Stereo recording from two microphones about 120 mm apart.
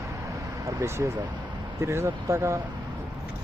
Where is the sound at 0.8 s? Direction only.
25° right (ahead or behind).